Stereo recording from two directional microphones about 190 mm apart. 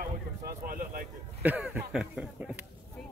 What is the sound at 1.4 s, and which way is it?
Speech, 10° right (ahead or behind).